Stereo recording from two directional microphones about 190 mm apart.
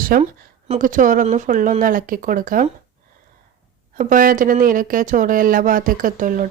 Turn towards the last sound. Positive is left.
turn(degrees=-45)  # may be behind; listen again after turning